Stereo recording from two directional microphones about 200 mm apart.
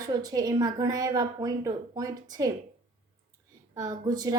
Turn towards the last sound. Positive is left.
turn(degrees=-20)  # may be behind; listen again after turning